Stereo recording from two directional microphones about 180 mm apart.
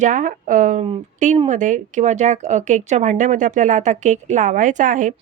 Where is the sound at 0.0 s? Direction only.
45° right (ahead or behind).